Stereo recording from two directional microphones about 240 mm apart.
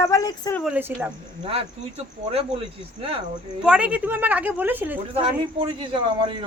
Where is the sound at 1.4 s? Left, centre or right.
Right.